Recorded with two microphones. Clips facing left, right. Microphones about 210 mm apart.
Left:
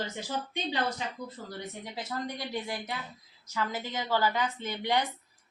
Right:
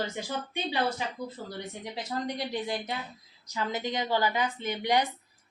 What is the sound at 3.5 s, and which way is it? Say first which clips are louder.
A woman's voice: right 2 dB; 20° right (ahead or behind).